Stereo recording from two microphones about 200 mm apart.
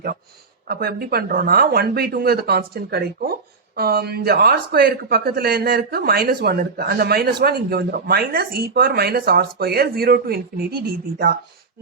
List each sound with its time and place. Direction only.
0.7 s speech: 50° right (ahead or behind)